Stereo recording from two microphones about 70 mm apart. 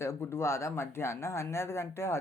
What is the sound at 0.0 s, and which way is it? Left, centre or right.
Speech, left.